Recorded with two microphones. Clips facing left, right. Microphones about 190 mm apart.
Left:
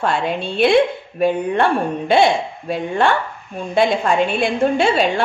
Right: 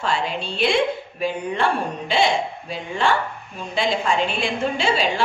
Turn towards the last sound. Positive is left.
turn(degrees=55)  # may be behind; listen again after turning